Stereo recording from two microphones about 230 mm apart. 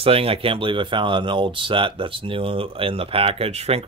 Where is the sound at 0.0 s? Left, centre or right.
Right.